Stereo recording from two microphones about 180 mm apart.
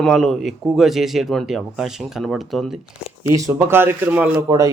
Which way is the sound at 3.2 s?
15° right (ahead or behind).